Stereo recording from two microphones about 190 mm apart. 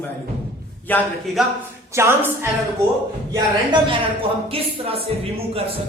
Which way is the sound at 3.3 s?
25° right (ahead or behind).